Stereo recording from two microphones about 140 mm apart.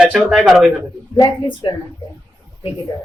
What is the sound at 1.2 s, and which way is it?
Speech, 35° left (ahead or behind).